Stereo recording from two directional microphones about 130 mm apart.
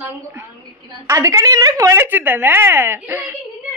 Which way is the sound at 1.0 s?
25° right (ahead or behind).